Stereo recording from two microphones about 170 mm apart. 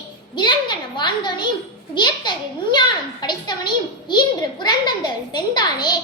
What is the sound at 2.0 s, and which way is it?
A child's voice, 25° left (ahead or behind).